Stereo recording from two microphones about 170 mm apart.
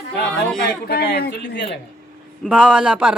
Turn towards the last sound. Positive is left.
turn(degrees=-5)  # may be behind; listen again after turning